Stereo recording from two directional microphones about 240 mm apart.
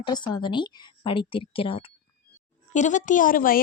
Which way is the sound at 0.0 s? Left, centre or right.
Centre.